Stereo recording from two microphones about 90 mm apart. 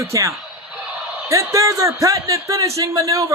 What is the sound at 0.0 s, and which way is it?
Speech, 35° right (ahead or behind).